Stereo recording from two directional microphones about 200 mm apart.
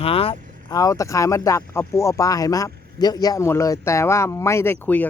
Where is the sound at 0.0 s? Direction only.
30° left (ahead or behind).